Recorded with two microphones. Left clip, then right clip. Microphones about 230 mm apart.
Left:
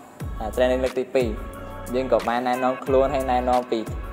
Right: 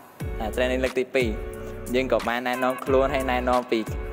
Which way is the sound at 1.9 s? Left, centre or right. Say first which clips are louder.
Left 2 dB; right.